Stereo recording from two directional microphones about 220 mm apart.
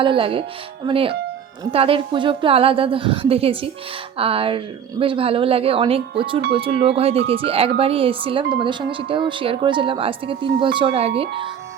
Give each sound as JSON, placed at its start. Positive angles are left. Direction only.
{"t": 0.0, "sound": "speech", "side_deg": -25}